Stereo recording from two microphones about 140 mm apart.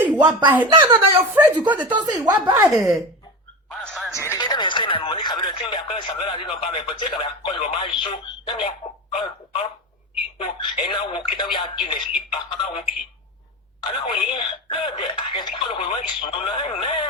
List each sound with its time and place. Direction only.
0.0 s speech: 10° right (ahead or behind)
0.8 s speech: 30° right (ahead or behind)
1.3 s speech: 10° right (ahead or behind)
2.4 s speech: 25° right (ahead or behind)
3.8 s music: centre (ahead or behind)
4.1 s speech: 20° left (ahead or behind)
4.4 s radio: 35° left (ahead or behind)
5.4 s speech: 35° left (ahead or behind)
10.3 s speech: 40° left (ahead or behind)
13.8 s speech: 35° left (ahead or behind)